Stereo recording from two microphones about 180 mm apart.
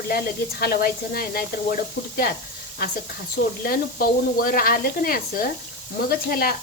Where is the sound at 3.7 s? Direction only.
55° left (ahead or behind).